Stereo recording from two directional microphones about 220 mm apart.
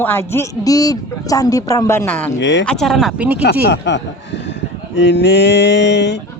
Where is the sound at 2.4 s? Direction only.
55° left (ahead or behind).